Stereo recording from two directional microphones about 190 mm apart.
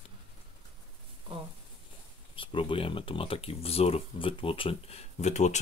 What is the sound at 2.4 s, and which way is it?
Speech, 25° left (ahead or behind).